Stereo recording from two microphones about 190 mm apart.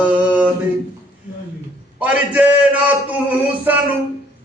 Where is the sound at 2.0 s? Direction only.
10° right (ahead or behind).